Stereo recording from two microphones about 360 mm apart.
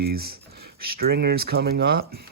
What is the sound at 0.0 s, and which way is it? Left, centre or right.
Speech, right.